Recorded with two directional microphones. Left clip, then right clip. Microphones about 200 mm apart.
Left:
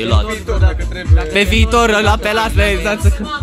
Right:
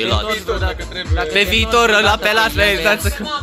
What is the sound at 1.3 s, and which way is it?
Speech, 20° left (ahead or behind).